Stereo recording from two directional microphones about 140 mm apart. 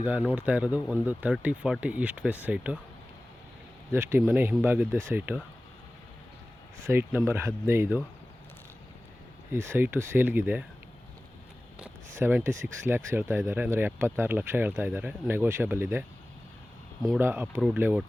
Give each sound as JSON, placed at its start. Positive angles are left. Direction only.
{"t": 0.0, "sound": "speech", "side_deg": -10}
{"t": 3.9, "sound": "speech", "side_deg": -15}
{"t": 6.9, "sound": "speech", "side_deg": -15}
{"t": 9.5, "sound": "speech", "side_deg": -20}
{"t": 12.2, "sound": "speech", "side_deg": -20}
{"t": 17.2, "sound": "speech", "side_deg": -15}